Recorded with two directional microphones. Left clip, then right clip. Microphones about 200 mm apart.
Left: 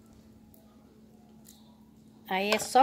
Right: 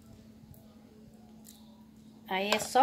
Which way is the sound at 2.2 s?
50° left (ahead or behind).